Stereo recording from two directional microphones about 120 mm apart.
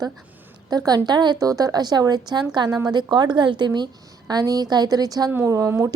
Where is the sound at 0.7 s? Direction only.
35° right (ahead or behind).